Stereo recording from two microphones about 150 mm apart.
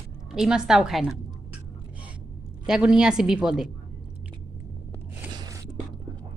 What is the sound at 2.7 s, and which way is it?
A woman's voice, 5° right (ahead or behind).